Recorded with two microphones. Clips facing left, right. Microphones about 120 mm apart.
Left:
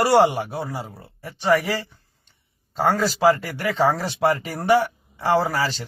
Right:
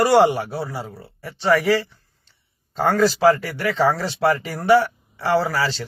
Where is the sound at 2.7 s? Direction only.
5° left (ahead or behind).